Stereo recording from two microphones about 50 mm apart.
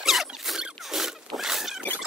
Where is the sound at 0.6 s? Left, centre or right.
Centre.